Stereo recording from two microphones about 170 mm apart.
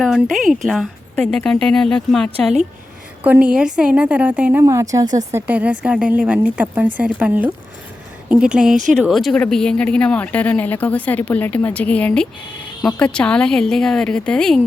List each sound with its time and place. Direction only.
0.0 s a woman's voice: centre (ahead or behind); by 5.1 s 20° right (ahead or behind)
5.3 s a woman's voice: 10° right (ahead or behind)
8.7 s speech: 45° right (ahead or behind)
9.0 s speech: centre (ahead or behind)